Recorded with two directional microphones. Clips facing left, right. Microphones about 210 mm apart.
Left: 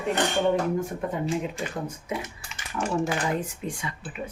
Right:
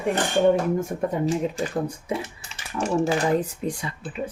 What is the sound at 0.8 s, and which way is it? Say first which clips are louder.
Speech: right 4 dB; 40° right (ahead or behind).